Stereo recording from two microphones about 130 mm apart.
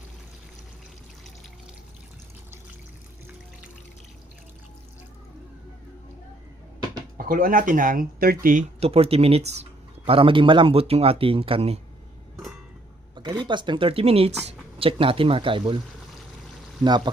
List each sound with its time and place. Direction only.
7.2 s speech: 90° right
8.8 s speech: 50° right (ahead or behind)
10.1 s speech: 45° right (ahead or behind)
13.1 s speech: 35° right (ahead or behind)